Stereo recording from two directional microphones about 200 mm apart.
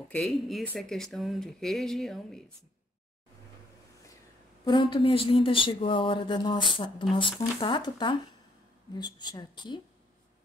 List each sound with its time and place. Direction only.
0.1 s speech: centre (ahead or behind)
4.6 s speech: 25° left (ahead or behind)